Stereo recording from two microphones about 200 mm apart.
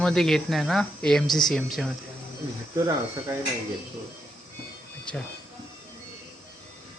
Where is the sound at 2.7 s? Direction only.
15° right (ahead or behind).